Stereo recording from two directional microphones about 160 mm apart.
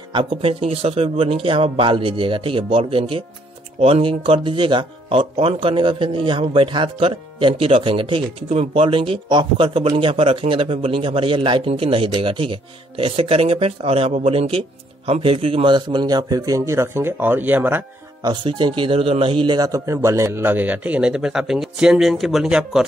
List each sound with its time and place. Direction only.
0.1 s a man's voice: 30° right (ahead or behind); by 17.8 s 10° right (ahead or behind)
18.2 s a man's voice: 30° right (ahead or behind); by 22.8 s 5° right (ahead or behind)